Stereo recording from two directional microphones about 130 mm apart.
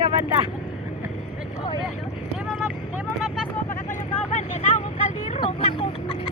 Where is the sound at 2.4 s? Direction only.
Centre (ahead or behind).